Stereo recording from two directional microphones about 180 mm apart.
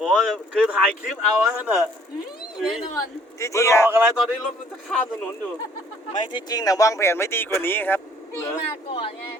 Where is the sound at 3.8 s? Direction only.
10° right (ahead or behind).